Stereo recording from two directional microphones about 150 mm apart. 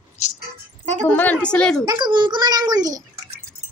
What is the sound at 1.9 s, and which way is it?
A child's voice, 30° right (ahead or behind).